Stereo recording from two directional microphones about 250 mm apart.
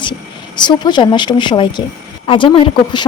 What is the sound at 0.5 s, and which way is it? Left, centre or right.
Speech, centre.